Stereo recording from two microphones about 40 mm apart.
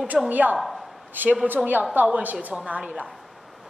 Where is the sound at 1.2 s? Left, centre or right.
Right.